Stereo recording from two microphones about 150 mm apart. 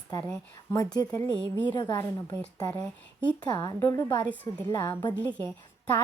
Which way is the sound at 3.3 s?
30° left (ahead or behind).